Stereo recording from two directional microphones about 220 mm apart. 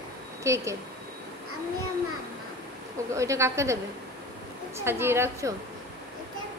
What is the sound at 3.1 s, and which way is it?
Speech, 15° right (ahead or behind).